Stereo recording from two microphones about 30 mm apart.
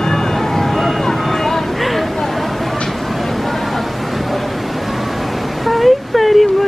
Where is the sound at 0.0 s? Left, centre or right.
Centre.